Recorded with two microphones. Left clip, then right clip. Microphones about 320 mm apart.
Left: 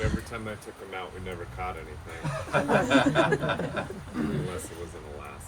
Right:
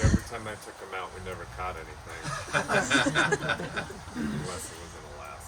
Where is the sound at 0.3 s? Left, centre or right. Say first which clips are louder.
Even; centre.